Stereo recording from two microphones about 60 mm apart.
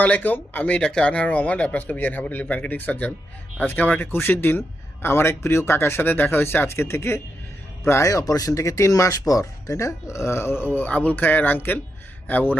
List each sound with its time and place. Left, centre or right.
0.0 s speech: left
7.9 s speech: left